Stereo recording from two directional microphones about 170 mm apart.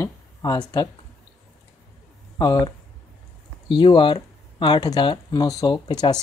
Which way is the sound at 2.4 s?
25° left (ahead or behind).